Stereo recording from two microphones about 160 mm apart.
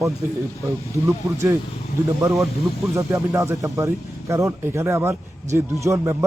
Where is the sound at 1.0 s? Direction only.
20° right (ahead or behind).